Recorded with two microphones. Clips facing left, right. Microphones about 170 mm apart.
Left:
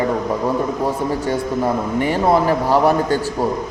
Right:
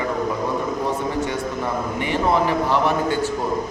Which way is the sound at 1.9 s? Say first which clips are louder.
Left 4 dB; 40° left (ahead or behind).